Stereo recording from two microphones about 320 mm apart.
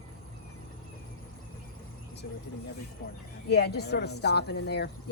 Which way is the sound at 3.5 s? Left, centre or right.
Left.